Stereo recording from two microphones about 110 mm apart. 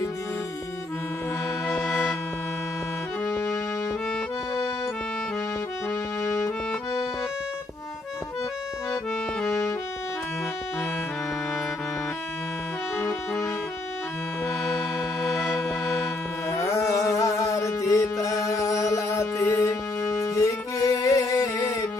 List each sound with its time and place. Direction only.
1.7 s music: centre (ahead or behind)
6.2 s accordion: 25° left (ahead or behind)
9.4 s music: 25° left (ahead or behind)
14.6 s music: centre (ahead or behind)
15.5 s music: 30° left (ahead or behind)